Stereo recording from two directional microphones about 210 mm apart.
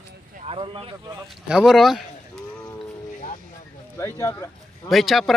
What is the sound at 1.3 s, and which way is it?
Speech, centre (ahead or behind).